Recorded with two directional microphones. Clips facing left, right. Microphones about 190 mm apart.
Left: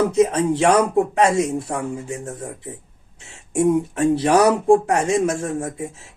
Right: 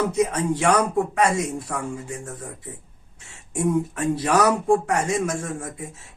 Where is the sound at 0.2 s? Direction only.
25° left (ahead or behind).